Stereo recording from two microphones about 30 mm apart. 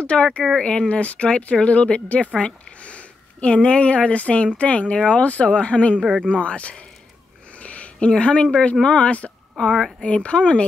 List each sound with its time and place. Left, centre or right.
0.1 s a woman's voice: left
0.6 s speech: left
5.2 s speech: left
5.5 s speech: left
7.5 s a sound: left
8.1 s speech: left
9.6 s a woman's voice: centre
10.0 s speech: left